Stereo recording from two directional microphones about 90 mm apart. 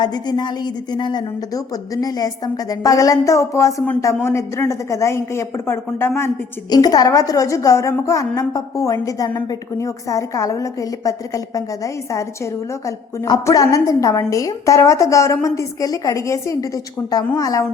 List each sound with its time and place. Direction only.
0.0 s a woman's voice: 50° left (ahead or behind)
1.5 s a woman's voice: 45° left (ahead or behind); by 6.3 s 25° left (ahead or behind)
6.7 s a woman's voice: 45° left (ahead or behind)
13.4 s a woman's voice: 40° left (ahead or behind)